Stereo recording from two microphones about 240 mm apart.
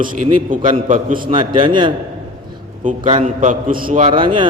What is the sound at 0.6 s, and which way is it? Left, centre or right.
A man's voice, right.